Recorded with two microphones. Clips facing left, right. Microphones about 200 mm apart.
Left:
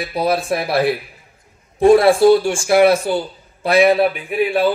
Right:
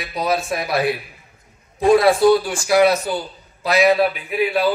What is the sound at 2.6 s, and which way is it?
Speech, 55° left (ahead or behind).